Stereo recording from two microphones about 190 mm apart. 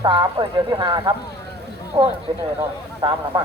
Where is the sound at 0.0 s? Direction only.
25° right (ahead or behind).